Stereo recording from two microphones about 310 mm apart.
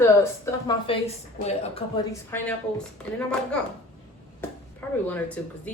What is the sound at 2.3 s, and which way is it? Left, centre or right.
Speech, centre.